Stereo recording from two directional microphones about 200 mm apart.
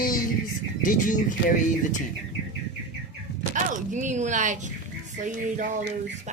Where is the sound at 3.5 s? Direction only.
40° right (ahead or behind).